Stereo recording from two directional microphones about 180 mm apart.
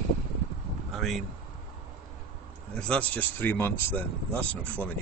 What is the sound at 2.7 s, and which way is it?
Speech, 5° left (ahead or behind).